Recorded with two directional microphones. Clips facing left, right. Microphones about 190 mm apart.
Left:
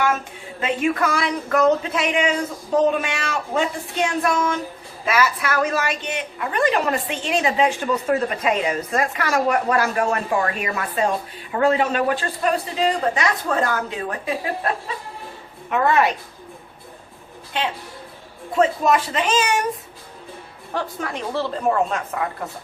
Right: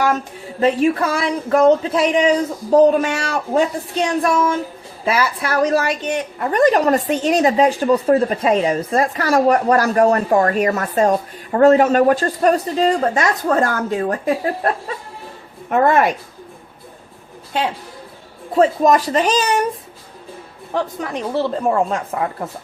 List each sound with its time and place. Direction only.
0.6 s a woman's voice: 35° right (ahead or behind)
5.0 s a woman's voice: 30° right (ahead or behind)
15.7 s speech: 50° right (ahead or behind)
18.5 s a woman's voice: 35° right (ahead or behind)
21.0 s a woman's voice: 20° right (ahead or behind)